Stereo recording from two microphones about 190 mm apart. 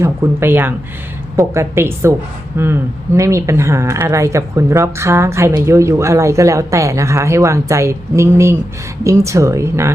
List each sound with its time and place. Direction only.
0.0 s speech: 10° right (ahead or behind)